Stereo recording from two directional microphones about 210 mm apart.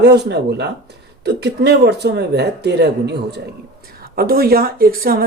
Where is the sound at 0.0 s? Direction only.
55° right (ahead or behind).